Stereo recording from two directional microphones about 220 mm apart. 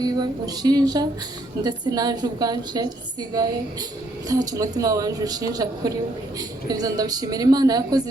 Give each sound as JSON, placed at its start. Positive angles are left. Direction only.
{"t": 0.0, "sound": "a woman's voice", "side_deg": -15}